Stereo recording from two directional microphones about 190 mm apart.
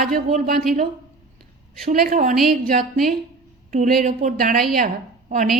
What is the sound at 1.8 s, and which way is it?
A woman's voice, 45° right (ahead or behind).